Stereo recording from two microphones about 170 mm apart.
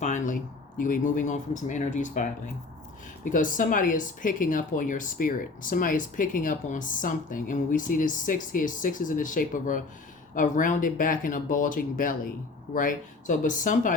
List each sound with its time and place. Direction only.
0.0 s speech: 45° left (ahead or behind)
3.2 s speech: 50° left (ahead or behind)